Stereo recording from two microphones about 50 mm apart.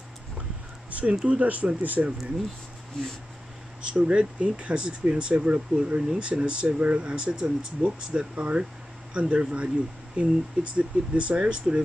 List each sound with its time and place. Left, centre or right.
0.8 s a sound: right
1.2 s speech: right
3.8 s speech: right